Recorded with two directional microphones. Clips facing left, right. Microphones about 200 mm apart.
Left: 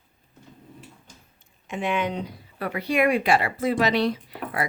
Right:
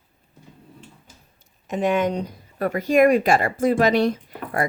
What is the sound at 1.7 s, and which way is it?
Speech, 40° right (ahead or behind).